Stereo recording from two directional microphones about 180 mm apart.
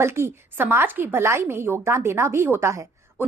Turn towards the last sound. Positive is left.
turn(degrees=-15)  # may be behind; listen again after turning